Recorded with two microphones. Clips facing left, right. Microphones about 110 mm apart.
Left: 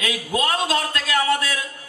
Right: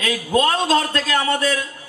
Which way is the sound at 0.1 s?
35° right (ahead or behind).